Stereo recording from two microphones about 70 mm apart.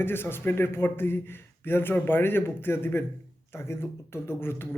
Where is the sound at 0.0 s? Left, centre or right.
Left.